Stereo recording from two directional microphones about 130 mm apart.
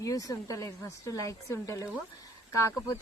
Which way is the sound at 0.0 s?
25° left (ahead or behind).